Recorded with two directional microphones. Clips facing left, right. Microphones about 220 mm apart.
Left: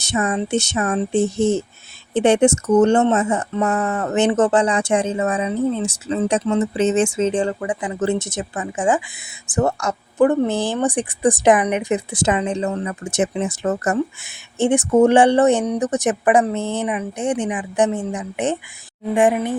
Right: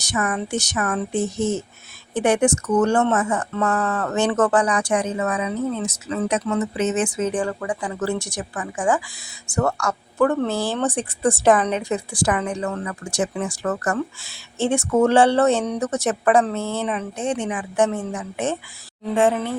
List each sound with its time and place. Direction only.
0.0 s speech: 25° left (ahead or behind)